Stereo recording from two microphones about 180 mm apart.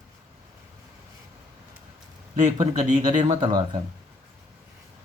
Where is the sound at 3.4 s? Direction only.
20° right (ahead or behind).